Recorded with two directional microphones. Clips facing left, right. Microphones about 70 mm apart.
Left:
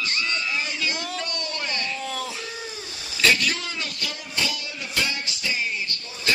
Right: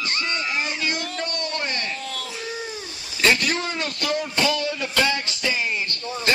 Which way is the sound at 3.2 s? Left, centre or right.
Right.